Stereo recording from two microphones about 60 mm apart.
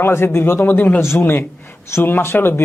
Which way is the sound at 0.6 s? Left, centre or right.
Left.